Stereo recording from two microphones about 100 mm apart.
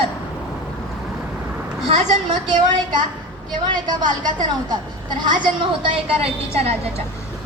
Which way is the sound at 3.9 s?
45° right (ahead or behind).